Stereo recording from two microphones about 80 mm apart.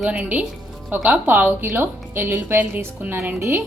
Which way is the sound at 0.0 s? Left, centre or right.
Centre.